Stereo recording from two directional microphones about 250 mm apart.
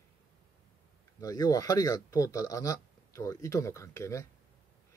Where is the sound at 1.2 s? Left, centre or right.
Centre.